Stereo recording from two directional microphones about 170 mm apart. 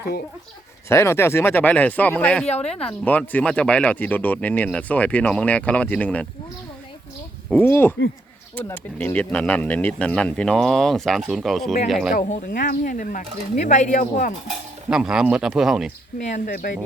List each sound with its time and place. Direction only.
0.9 s speech: 15° left (ahead or behind)
7.5 s speech: 15° left (ahead or behind)
12.1 s speech: 55° left (ahead or behind)
14.8 s speech: 5° right (ahead or behind)
16.5 s speech: 55° left (ahead or behind)